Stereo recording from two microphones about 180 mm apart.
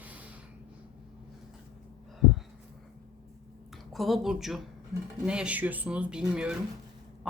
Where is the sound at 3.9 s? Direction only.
Centre (ahead or behind).